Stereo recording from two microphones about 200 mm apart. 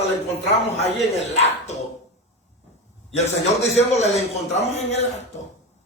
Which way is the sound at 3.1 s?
35° left (ahead or behind).